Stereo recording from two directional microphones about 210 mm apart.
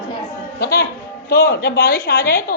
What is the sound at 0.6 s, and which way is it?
A woman's voice, 50° left (ahead or behind).